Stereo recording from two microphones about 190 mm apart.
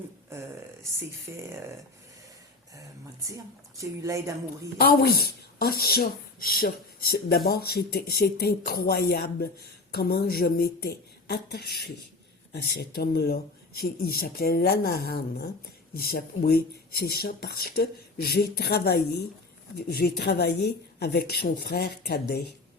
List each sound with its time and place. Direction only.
1.3 s a woman's voice: 15° right (ahead or behind)
3.2 s a woman's voice: 15° right (ahead or behind)
4.8 s speech: 55° left (ahead or behind)